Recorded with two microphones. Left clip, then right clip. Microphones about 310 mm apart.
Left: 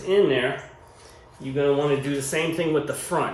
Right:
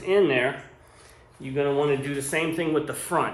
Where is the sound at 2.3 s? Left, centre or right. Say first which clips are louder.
Left 1 dB; centre.